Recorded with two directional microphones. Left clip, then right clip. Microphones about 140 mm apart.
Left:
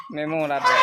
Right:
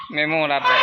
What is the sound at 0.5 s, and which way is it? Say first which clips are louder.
Speech: even; 5° right (ahead or behind).